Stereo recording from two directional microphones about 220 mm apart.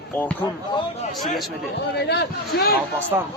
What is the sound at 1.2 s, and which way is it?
Speech, centre (ahead or behind).